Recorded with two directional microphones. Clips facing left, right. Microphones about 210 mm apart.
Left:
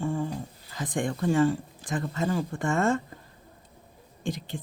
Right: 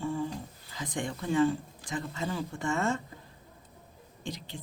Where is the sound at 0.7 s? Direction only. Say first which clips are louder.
Left 6 dB; 50° left (ahead or behind).